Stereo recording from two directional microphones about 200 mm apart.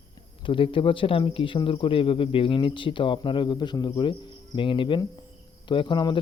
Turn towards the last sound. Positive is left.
turn(degrees=25)  # may be behind; listen again after turning